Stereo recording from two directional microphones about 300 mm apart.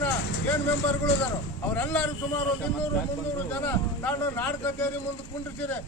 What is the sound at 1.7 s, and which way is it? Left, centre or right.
Speech, centre.